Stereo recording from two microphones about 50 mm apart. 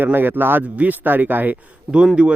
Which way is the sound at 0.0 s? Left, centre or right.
Right.